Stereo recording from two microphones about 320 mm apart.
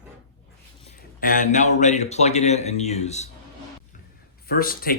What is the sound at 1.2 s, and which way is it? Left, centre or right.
Speech, left.